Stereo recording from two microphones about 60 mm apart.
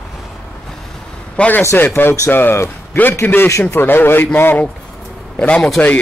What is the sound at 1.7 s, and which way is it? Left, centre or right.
A man's voice, left.